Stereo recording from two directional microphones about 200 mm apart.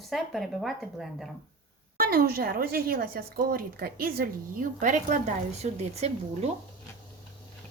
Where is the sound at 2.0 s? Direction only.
45° right (ahead or behind).